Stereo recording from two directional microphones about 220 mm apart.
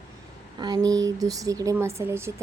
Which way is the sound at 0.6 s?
20° right (ahead or behind).